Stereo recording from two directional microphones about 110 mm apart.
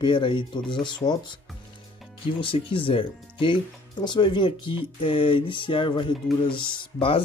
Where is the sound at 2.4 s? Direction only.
55° left (ahead or behind).